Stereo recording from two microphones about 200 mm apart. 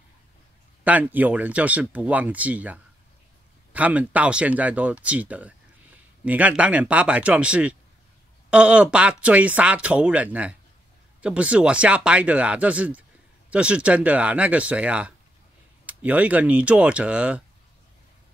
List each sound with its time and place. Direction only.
0.8 s speech: 10° right (ahead or behind)